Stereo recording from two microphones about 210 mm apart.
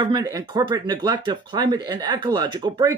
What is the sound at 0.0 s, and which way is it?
Speech, 20° right (ahead or behind).